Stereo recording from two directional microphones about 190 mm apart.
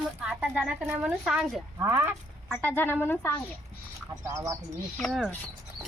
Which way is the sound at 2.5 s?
10° left (ahead or behind).